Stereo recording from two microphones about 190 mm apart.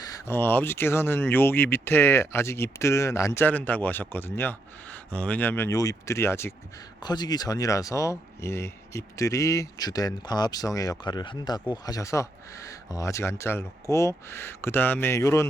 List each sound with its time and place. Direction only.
0.0 s speech: 15° left (ahead or behind)